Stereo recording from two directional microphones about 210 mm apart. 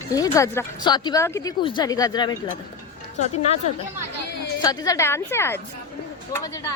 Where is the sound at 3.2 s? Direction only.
30° left (ahead or behind).